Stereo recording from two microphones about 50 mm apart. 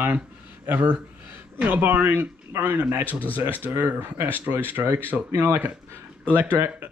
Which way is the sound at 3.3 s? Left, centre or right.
Right.